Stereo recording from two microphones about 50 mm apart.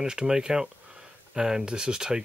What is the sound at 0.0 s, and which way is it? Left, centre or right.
Speech, centre.